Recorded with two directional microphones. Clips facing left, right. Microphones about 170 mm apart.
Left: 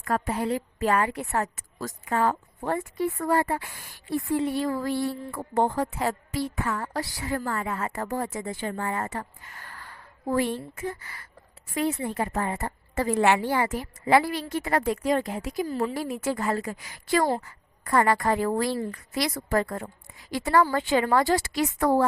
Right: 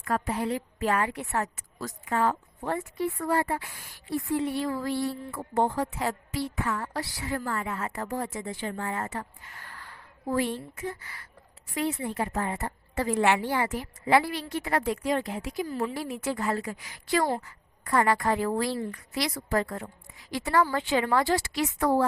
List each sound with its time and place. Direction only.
0.0 s a woman's voice: 45° left (ahead or behind)